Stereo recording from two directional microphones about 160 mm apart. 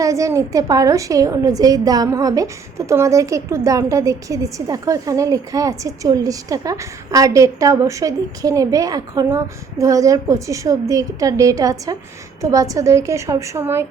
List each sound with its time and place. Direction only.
0.0 s a woman's voice: 20° right (ahead or behind)